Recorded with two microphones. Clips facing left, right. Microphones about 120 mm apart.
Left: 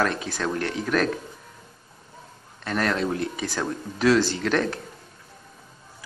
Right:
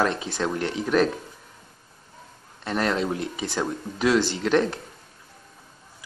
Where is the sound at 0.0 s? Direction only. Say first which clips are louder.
Right 1 dB; 20° right (ahead or behind).